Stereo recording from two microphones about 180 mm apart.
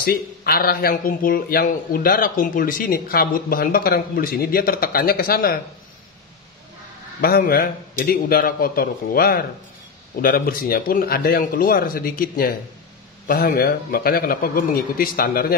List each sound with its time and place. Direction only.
0.0 s speech: 55° left (ahead or behind)
7.2 s speech: 55° left (ahead or behind)